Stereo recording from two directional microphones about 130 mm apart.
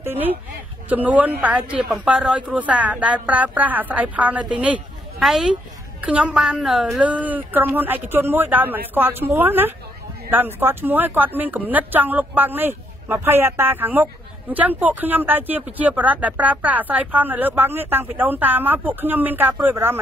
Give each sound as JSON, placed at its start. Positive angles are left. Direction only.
{"t": 0.0, "sound": "speech", "side_deg": -15}